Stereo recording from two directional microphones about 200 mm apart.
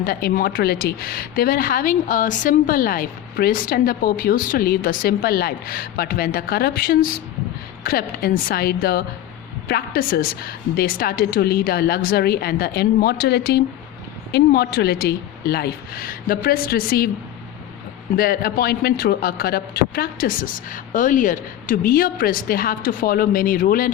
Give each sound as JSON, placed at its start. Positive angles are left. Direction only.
{"t": 0.0, "sound": "a woman's voice", "side_deg": 50}
{"t": 18.2, "sound": "a woman's voice", "side_deg": 50}